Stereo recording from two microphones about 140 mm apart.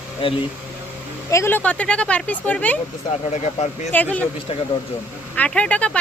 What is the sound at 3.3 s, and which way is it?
Speech, 50° left (ahead or behind).